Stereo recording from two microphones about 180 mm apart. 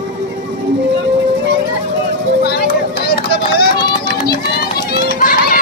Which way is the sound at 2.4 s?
55° left (ahead or behind).